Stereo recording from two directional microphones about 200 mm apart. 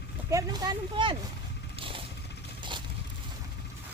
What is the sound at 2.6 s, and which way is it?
Crushing, 25° right (ahead or behind).